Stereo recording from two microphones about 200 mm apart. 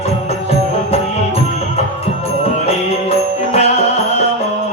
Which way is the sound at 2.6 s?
30° left (ahead or behind).